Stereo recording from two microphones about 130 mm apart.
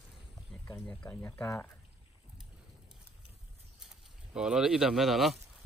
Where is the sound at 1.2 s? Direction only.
20° left (ahead or behind).